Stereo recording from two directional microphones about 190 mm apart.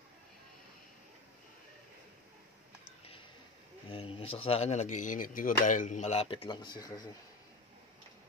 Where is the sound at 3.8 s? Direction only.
30° left (ahead or behind).